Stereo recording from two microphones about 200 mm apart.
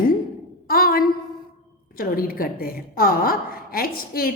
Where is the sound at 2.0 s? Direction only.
45° left (ahead or behind).